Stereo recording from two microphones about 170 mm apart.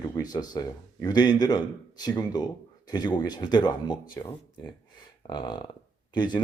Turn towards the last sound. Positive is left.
turn(degrees=25)  # may be behind; listen again after turning